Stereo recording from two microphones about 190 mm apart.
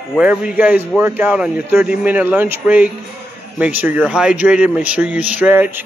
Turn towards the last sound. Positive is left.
turn(degrees=-10)  # may be behind; listen again after turning